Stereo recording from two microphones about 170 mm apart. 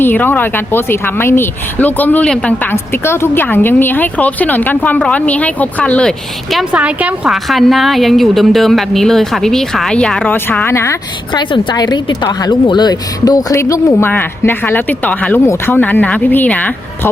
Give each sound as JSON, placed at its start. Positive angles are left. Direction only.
{"t": 0.0, "sound": "speech", "side_deg": 10}